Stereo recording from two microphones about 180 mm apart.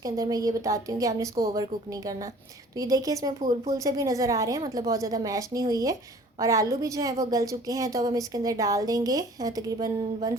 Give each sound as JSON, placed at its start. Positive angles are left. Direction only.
{"t": 0.0, "sound": "a woman's voice", "side_deg": -20}